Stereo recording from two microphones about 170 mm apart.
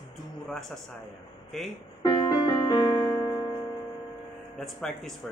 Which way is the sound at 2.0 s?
25° left (ahead or behind).